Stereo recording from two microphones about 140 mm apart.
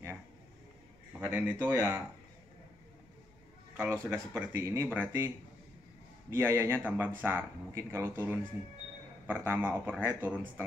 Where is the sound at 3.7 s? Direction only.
10° right (ahead or behind).